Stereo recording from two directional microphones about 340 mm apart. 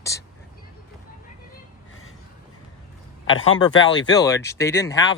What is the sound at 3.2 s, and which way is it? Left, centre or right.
Speech, left.